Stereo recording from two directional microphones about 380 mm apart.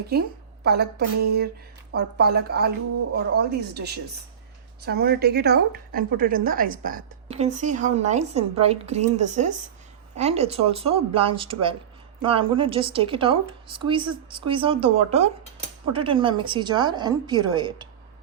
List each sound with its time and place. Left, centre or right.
0.1 s a woman's voice: right